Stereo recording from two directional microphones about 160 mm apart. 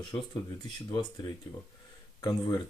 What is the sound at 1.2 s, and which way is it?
Speech, 20° left (ahead or behind).